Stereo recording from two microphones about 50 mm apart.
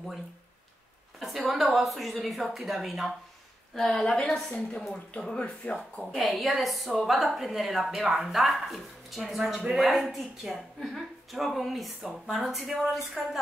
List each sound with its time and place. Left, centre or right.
1.2 s a woman's voice: centre
3.7 s a woman's voice: centre; by 5.8 s left
6.1 s a woman's voice: centre